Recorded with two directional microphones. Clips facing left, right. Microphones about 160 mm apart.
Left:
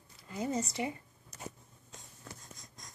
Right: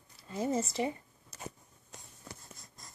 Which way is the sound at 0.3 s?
30° right (ahead or behind).